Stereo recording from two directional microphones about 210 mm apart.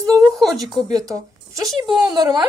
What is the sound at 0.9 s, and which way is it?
Speech, 15° right (ahead or behind).